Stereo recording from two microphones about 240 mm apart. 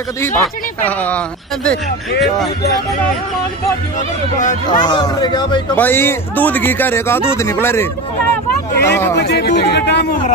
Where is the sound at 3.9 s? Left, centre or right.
Left.